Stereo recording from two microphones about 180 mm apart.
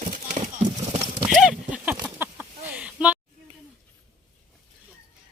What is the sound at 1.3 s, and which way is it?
Horse, centre (ahead or behind).